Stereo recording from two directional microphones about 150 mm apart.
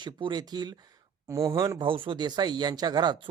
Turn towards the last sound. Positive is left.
turn(degrees=-30)  # may be behind; listen again after turning